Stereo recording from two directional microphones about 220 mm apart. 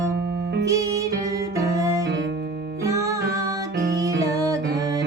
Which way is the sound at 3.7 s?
50° right (ahead or behind).